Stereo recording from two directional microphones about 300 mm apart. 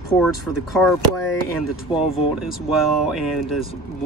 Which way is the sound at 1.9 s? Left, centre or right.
Centre.